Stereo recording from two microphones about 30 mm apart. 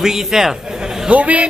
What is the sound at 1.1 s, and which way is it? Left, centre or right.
Speech, right.